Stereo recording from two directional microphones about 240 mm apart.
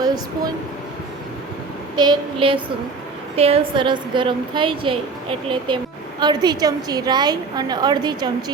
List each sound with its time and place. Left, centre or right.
0.0 s speech: centre
2.0 s a woman's voice: centre